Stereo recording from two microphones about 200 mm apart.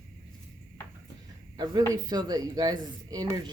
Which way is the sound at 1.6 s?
20° right (ahead or behind).